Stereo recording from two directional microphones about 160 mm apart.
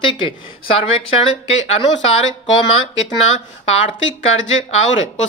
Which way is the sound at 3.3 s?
40° left (ahead or behind).